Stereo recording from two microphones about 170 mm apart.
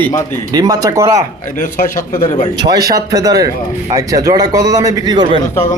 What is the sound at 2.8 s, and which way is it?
Speech, 20° right (ahead or behind).